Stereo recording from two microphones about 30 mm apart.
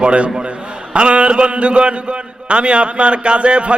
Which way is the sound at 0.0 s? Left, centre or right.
Right.